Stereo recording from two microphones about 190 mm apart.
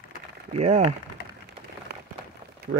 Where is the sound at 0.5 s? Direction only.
35° right (ahead or behind).